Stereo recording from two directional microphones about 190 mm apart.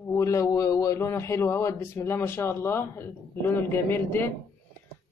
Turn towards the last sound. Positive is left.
turn(degrees=10)  # may be behind; listen again after turning